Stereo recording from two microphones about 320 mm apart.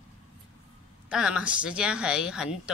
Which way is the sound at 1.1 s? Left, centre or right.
Centre.